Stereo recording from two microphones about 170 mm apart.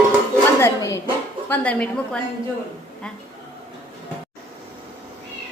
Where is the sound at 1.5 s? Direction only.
10° left (ahead or behind).